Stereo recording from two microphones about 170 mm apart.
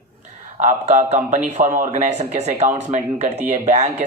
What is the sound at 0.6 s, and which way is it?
Speech, 45° right (ahead or behind).